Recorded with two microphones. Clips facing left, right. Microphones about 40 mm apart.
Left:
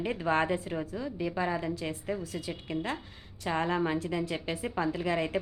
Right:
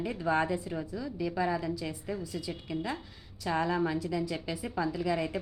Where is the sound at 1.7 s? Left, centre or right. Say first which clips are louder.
Left 2 dB; left.